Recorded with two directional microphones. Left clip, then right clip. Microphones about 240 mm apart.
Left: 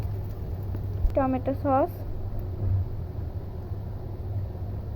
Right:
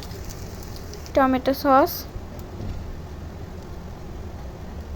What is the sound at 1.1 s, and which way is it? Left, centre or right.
Speech, right.